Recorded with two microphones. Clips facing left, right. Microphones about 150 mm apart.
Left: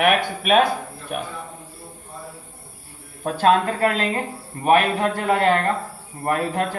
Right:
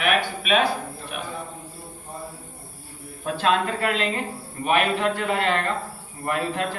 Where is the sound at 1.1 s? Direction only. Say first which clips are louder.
Left 6 dB; 45° left (ahead or behind).